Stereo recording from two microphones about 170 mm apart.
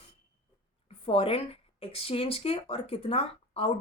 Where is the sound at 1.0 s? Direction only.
35° left (ahead or behind).